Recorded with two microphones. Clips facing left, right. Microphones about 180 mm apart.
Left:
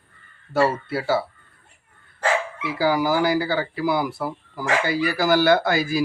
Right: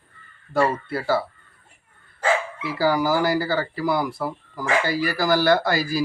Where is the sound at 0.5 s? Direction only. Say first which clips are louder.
Left 1 dB; 5° left (ahead or behind).